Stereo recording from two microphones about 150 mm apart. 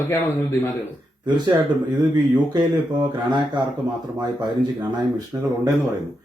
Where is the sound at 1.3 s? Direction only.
30° right (ahead or behind).